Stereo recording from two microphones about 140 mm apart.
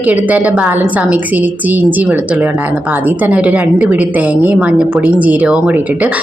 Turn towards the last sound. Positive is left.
turn(degrees=-10)  # may be behind; listen again after turning